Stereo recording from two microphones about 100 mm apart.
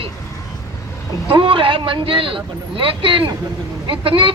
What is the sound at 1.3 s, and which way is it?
A man's voice, 60° right (ahead or behind).